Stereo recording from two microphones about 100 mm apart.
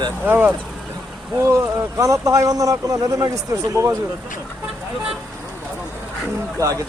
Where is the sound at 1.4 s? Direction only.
30° right (ahead or behind).